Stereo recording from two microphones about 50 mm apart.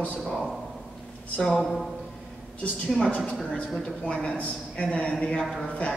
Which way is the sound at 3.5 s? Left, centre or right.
Centre.